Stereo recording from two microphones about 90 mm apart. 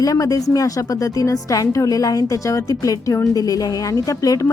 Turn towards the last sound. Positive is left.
turn(degrees=40)  # may be behind; listen again after turning